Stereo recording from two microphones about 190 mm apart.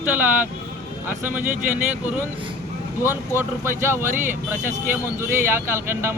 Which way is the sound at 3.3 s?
10° right (ahead or behind).